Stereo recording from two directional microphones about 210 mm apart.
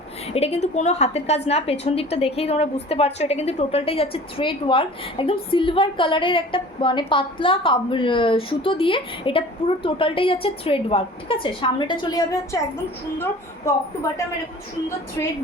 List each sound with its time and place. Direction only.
0.3 s a woman's voice: 30° left (ahead or behind)